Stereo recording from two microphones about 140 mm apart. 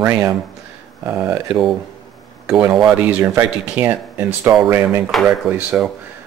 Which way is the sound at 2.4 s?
5° right (ahead or behind).